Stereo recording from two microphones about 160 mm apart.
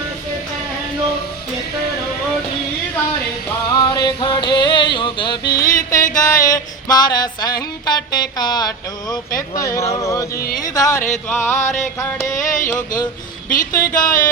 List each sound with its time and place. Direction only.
3.7 s music: 25° left (ahead or behind)
5.4 s music: 70° left (ahead or behind)
6.1 s music: 20° left (ahead or behind)
10.0 s a sound: 20° left (ahead or behind)
11.3 s music: 15° left (ahead or behind)
12.4 s a sound: 55° left (ahead or behind)